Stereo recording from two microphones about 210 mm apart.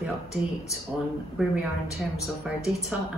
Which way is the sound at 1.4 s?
Centre (ahead or behind).